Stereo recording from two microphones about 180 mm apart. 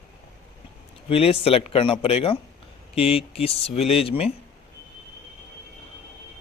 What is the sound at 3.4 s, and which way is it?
Speech, 35° left (ahead or behind).